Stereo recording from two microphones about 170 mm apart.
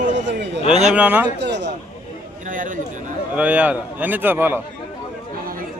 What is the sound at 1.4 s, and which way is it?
Speech, 90° right.